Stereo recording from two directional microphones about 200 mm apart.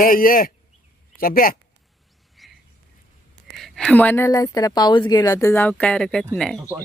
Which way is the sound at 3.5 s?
Centre (ahead or behind).